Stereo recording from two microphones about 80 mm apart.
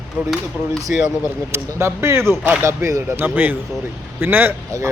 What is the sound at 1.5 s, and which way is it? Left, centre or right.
Speech, right.